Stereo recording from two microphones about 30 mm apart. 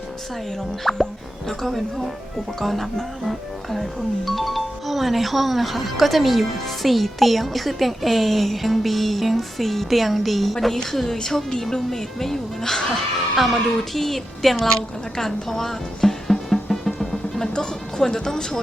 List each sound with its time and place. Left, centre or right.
0.9 s speech: centre
15.2 s music: centre
17.5 s speech: left